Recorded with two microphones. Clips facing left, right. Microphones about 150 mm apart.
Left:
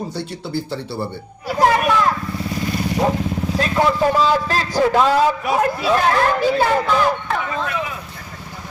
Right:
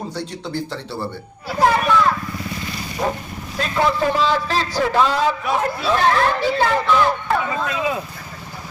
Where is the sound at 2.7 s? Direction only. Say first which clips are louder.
Left 9 dB; 60° left (ahead or behind).